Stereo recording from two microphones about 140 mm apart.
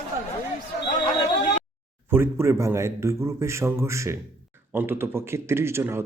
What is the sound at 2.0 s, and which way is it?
A man's voice, 15° right (ahead or behind).